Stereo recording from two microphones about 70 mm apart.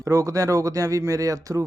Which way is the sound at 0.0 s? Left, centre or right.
Right.